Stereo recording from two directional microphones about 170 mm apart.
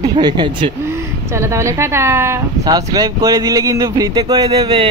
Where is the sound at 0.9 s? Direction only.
15° right (ahead or behind).